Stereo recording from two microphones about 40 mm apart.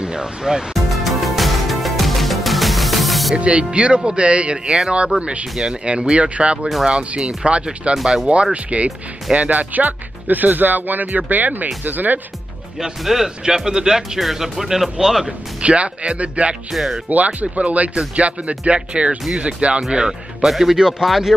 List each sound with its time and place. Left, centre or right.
0.0 s speech: right
0.9 s music: centre
3.3 s speech: right
5.9 s speech: right
7.9 s speech: centre
8.6 s speech: right
13.0 s speech: centre
13.5 s speech: centre
15.2 s speech: right
16.7 s speech: centre
17.1 s speech: right
19.9 s speech: centre
20.3 s speech: centre